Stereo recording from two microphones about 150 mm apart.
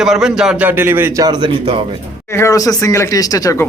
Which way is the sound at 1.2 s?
30° right (ahead or behind).